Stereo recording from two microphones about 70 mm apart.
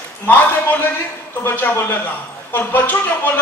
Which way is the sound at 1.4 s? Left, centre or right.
Left.